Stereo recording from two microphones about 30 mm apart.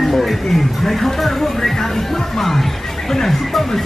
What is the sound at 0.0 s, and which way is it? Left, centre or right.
Speech, centre.